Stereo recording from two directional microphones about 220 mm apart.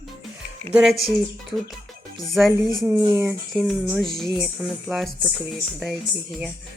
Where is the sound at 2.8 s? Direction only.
10° right (ahead or behind).